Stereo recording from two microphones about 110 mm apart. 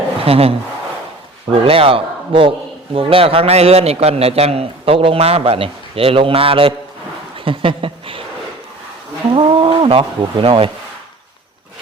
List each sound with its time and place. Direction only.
0.3 s a man's voice: 65° right (ahead or behind)
1.6 s a man's voice: 60° right (ahead or behind)
9.3 s a man's voice: 55° right (ahead or behind)